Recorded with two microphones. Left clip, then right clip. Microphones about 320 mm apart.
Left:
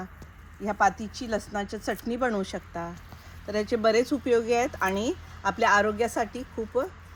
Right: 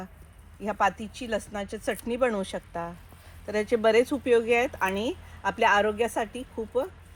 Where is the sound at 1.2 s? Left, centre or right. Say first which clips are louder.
Left 1 dB; centre.